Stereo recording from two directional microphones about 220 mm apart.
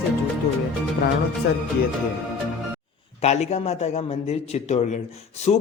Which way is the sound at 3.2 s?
30° left (ahead or behind).